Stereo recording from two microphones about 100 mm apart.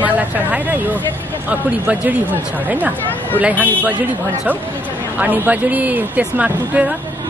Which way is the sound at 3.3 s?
15° right (ahead or behind).